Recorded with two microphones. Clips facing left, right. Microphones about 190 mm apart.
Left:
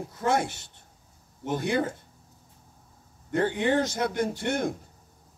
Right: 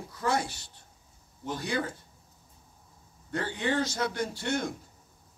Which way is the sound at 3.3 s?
55° left (ahead or behind).